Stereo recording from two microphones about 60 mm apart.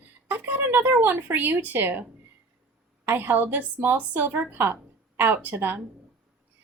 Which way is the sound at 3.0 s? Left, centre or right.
Right.